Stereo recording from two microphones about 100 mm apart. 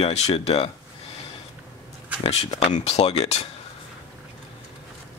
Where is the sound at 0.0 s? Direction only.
90° left.